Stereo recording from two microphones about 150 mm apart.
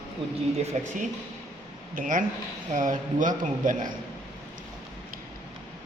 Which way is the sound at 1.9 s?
60° right (ahead or behind).